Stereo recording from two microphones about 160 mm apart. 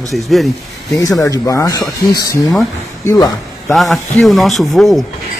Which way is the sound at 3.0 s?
25° left (ahead or behind).